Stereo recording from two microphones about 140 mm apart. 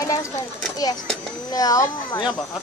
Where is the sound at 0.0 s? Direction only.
25° left (ahead or behind).